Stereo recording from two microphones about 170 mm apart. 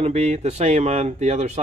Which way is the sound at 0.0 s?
40° right (ahead or behind).